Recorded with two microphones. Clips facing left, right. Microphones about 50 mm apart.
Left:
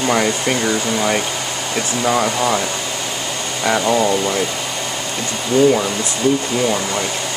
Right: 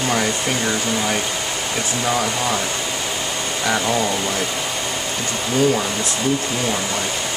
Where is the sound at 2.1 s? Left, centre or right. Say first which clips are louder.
Left 5 dB; centre.